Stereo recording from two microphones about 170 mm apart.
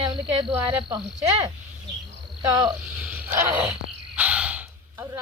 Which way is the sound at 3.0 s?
10° right (ahead or behind).